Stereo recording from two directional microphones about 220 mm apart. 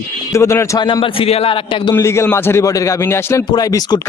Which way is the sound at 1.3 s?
25° left (ahead or behind).